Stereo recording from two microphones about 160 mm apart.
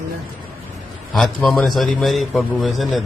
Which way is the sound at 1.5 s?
Centre (ahead or behind).